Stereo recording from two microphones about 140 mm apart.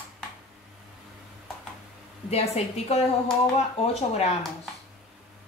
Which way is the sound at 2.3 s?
45° left (ahead or behind).